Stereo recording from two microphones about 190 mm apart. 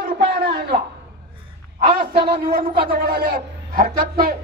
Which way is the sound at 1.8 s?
25° right (ahead or behind).